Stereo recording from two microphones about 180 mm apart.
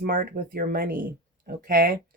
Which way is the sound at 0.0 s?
55° right (ahead or behind).